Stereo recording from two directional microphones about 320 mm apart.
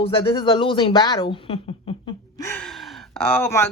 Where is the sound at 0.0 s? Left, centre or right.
Centre.